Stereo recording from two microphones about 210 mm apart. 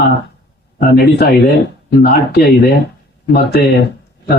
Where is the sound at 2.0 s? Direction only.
50° left (ahead or behind).